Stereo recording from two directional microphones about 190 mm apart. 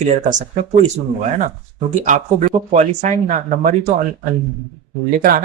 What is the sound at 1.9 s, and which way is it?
Speech, 40° right (ahead or behind).